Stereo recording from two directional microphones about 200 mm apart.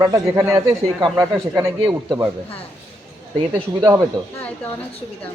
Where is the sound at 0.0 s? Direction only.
20° right (ahead or behind).